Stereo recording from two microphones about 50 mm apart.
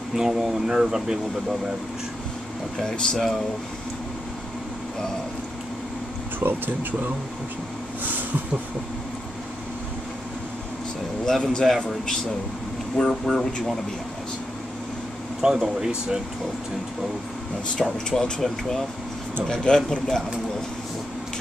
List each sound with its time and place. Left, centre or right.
0.1 s speech: centre
2.8 s speech: centre
6.4 s speech: right
11.2 s a man's voice: centre
12.9 s a man's voice: centre
15.4 s speech: centre
17.8 s a man's voice: centre